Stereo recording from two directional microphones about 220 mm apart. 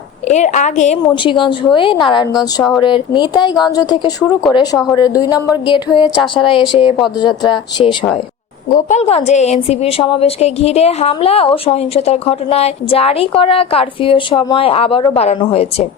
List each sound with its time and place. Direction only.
0.3 s a woman's voice: 30° left (ahead or behind)
8.7 s a woman's voice: 30° left (ahead or behind)